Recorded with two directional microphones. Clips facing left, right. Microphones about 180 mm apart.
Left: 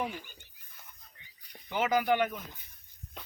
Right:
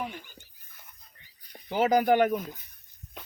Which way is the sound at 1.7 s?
40° right (ahead or behind).